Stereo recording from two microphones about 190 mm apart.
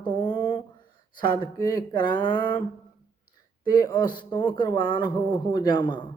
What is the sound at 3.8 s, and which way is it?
Speech, 25° left (ahead or behind).